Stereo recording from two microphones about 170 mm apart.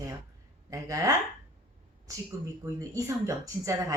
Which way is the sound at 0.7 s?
20° right (ahead or behind).